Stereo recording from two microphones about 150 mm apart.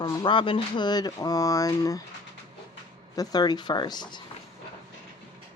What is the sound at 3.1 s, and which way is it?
Speech, 25° left (ahead or behind).